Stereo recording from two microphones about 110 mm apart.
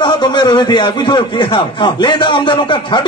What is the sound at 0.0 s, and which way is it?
A man's voice, 45° left (ahead or behind).